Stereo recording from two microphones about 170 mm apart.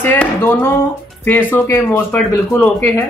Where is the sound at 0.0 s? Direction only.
10° left (ahead or behind).